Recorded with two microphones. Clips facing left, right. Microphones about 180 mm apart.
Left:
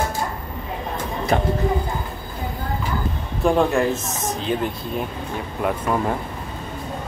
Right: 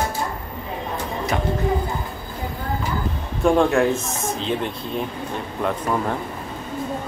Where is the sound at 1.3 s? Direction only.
35° left (ahead or behind).